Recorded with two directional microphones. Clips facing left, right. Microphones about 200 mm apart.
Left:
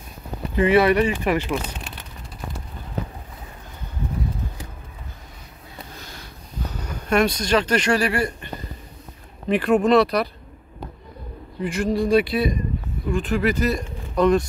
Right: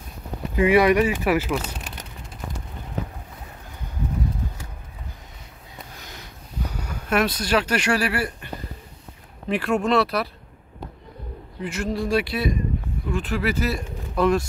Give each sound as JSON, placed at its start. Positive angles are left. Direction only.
{"t": 0.6, "sound": "speech", "side_deg": -10}
{"t": 5.9, "sound": "a sound", "side_deg": -15}
{"t": 6.7, "sound": "speech", "side_deg": -10}
{"t": 9.5, "sound": "speech", "side_deg": 0}
{"t": 11.6, "sound": "speech", "side_deg": 0}